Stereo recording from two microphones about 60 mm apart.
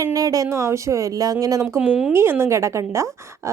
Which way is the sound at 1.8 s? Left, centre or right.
Right.